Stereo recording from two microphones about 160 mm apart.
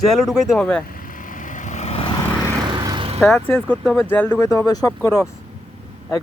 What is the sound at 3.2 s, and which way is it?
Speech, 5° left (ahead or behind).